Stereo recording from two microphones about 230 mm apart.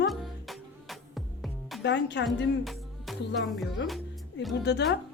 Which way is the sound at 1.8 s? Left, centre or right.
Left.